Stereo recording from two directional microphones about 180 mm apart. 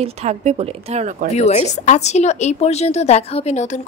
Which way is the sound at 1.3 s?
40° left (ahead or behind).